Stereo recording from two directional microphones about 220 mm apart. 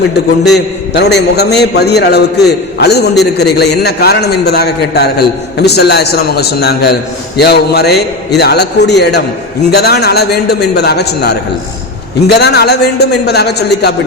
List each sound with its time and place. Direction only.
0.9 s a man's voice: 50° left (ahead or behind)